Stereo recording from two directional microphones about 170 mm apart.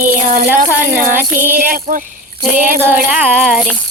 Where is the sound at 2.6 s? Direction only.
10° right (ahead or behind).